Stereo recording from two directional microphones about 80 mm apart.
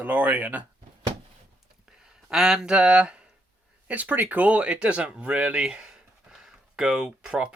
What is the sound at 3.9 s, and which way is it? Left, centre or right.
Speech, right.